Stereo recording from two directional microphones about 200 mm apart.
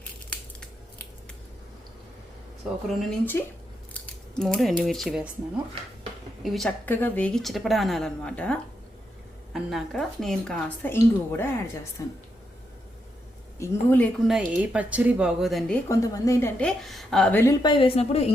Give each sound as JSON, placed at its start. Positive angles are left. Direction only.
{"t": 0.0, "sound": "crushing", "side_deg": 5}
{"t": 3.1, "sound": "speech", "side_deg": 10}
{"t": 6.4, "sound": "speech", "side_deg": 0}
{"t": 13.6, "sound": "speech", "side_deg": 10}
{"t": 14.3, "sound": "speech", "side_deg": -5}
{"t": 15.9, "sound": "speech", "side_deg": 15}
{"t": 17.6, "sound": "a woman's voice", "side_deg": 25}